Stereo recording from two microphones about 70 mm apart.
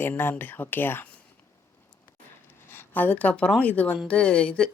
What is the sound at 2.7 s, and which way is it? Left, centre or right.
A woman's voice, left.